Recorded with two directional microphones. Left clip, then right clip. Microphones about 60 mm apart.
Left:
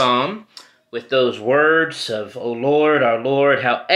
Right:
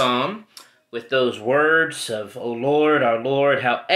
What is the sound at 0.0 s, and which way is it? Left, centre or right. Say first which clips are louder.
Speech: left 3 dB; left.